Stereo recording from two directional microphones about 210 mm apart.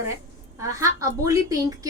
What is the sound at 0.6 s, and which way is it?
A woman's voice, 15° right (ahead or behind).